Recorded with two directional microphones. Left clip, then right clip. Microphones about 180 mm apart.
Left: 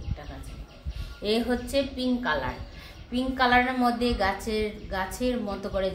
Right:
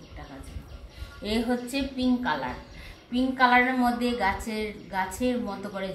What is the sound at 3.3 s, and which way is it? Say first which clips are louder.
A woman's voice: right 1 dB; 25° left (ahead or behind).